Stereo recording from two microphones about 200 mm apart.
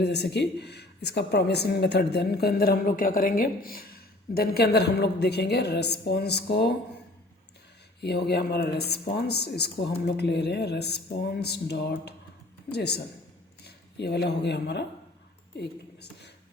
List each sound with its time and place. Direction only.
0.0 s a woman's voice: 55° left (ahead or behind)
8.0 s speech: 55° left (ahead or behind)
15.5 s a sound: 55° left (ahead or behind)